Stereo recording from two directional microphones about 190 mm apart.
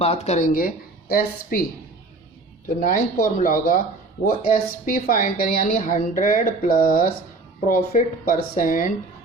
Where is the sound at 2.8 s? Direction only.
45° left (ahead or behind).